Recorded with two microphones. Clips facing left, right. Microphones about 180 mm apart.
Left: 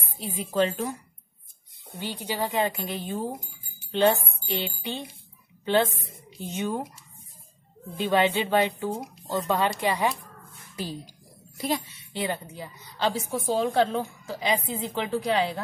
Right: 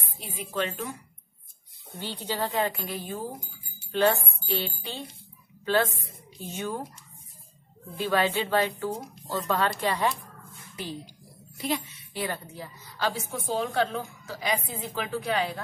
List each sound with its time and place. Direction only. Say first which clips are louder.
0.2 s speech: left 6 dB; 25° left (ahead or behind)
0.6 s a woman's voice: left 6 dB; 40° left (ahead or behind)
2.0 s speech: left 1 dB; 15° left (ahead or behind)
8.0 s speech: left 3 dB; 20° left (ahead or behind)
11.5 s speech: left 2 dB; 40° left (ahead or behind)
12.1 s a woman's voice: left 3 dB; 20° left (ahead or behind)